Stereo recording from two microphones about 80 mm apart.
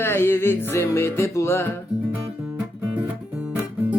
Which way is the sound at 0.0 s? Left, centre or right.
Left.